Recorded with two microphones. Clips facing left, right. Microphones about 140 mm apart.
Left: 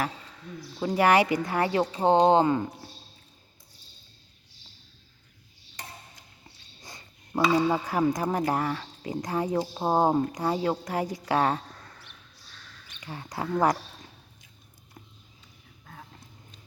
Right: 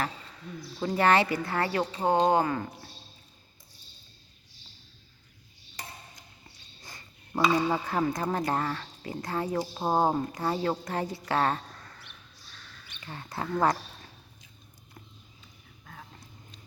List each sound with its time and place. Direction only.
0.8 s speech: 10° left (ahead or behind)
6.8 s a sound: 15° left (ahead or behind)
7.4 s speech: 10° left (ahead or behind)
13.0 s speech: 15° left (ahead or behind)